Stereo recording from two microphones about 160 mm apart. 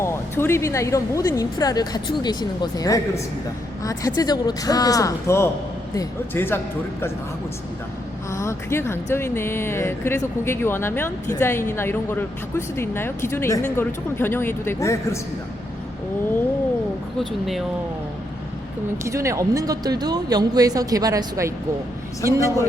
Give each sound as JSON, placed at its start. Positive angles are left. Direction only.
{"t": 0.0, "sound": "speech", "side_deg": 15}
{"t": 8.3, "sound": "speech", "side_deg": 20}
{"t": 17.2, "sound": "speech", "side_deg": 0}
{"t": 19.0, "sound": "speech", "side_deg": -20}